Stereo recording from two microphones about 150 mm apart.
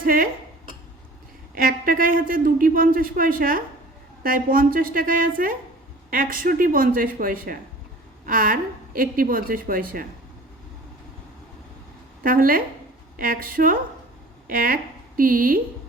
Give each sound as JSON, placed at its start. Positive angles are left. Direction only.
{"t": 0.0, "sound": "speech", "side_deg": -70}
{"t": 1.5, "sound": "a man's voice", "side_deg": -70}
{"t": 12.2, "sound": "a man's voice", "side_deg": -70}